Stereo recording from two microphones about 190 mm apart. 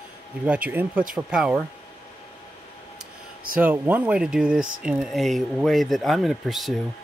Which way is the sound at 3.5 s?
10° right (ahead or behind).